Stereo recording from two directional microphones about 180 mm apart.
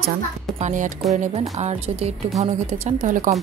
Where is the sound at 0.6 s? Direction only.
45° right (ahead or behind).